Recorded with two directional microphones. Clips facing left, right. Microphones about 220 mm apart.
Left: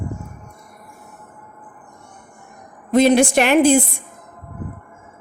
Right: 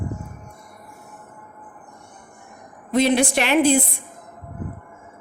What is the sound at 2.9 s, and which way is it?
Speech, 45° left (ahead or behind).